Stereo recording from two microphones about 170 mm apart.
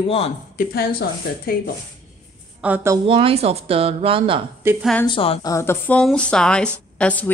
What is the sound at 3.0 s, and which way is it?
Speech, 35° right (ahead or behind).